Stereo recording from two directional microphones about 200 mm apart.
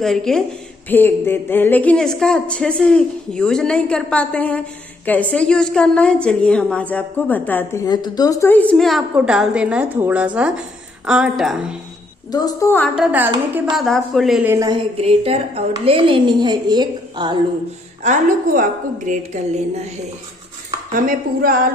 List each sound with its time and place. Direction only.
0.0 s a woman's voice: centre (ahead or behind)
12.3 s a woman's voice: 20° left (ahead or behind)
12.9 s a woman's voice: 5° right (ahead or behind)
14.5 s speech: 15° right (ahead or behind)
15.0 s a woman's voice: 30° right (ahead or behind)
18.0 s a woman's voice: 40° right (ahead or behind)
20.9 s dishes: 45° right (ahead or behind)